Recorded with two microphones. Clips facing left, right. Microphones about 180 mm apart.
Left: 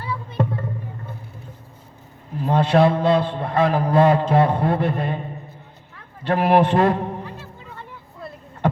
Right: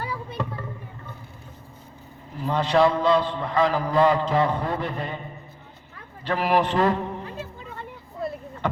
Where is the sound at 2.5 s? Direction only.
50° left (ahead or behind).